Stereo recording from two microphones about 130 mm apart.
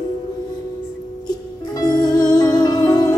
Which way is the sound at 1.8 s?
30° left (ahead or behind).